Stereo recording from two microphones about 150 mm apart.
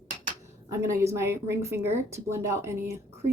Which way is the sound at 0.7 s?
20° right (ahead or behind).